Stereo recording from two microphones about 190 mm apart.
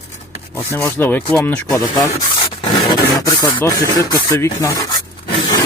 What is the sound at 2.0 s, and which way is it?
Rub, 20° left (ahead or behind).